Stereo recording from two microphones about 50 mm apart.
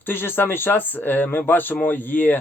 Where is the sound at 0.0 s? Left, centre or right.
Left.